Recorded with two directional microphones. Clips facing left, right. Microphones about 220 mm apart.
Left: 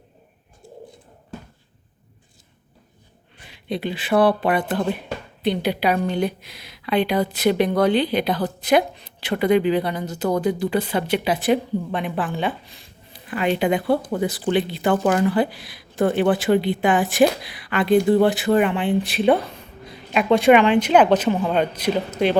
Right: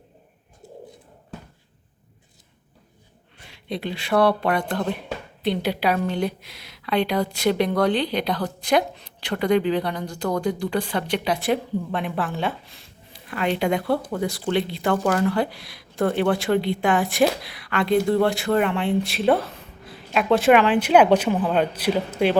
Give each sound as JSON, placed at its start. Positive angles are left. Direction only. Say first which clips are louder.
{"t": 3.4, "sound": "a man's voice", "louder": "left 3 dB", "side_deg": 0}